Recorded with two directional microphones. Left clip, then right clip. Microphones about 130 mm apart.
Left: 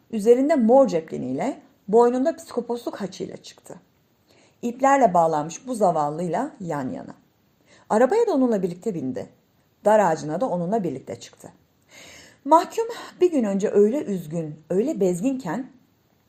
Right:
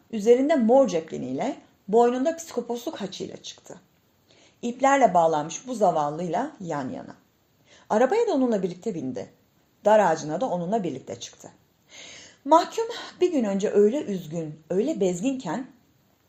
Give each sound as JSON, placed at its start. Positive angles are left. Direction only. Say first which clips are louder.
{"t": 0.1, "sound": "a woman's voice", "louder": "left 2 dB", "side_deg": 40}